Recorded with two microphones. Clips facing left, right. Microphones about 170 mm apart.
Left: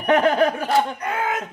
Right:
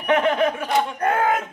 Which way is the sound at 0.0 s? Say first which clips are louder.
Left 2 dB; 35° left (ahead or behind).